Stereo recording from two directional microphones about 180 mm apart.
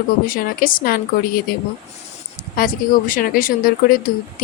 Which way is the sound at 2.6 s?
50° left (ahead or behind).